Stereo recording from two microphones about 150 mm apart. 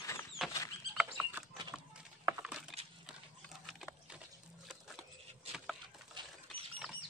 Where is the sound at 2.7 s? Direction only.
Centre (ahead or behind).